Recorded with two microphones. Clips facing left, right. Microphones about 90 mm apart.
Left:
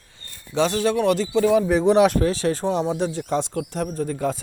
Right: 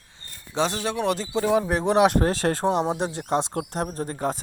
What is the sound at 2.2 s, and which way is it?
Speech, 50° right (ahead or behind).